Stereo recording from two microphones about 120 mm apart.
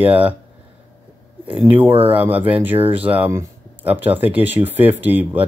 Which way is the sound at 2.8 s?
50° right (ahead or behind).